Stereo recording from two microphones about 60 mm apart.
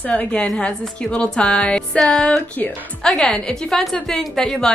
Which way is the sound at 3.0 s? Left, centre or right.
Centre.